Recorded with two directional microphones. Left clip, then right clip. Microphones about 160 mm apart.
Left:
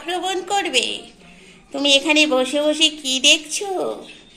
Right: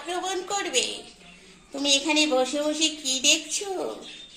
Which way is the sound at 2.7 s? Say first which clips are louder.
Left 8 dB; 40° right (ahead or behind).